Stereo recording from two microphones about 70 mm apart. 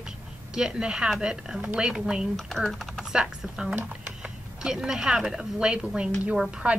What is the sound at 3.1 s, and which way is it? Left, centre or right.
A woman's voice, centre.